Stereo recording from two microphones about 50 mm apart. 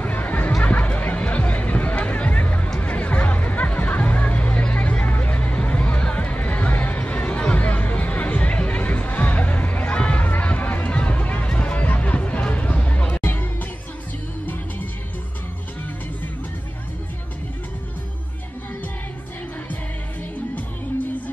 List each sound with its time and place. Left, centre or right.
0.0 s a sound: left
0.5 s music: centre
0.7 s music: left
13.2 s music: left